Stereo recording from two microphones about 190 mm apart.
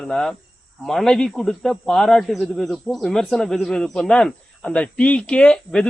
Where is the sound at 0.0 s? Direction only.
Centre (ahead or behind).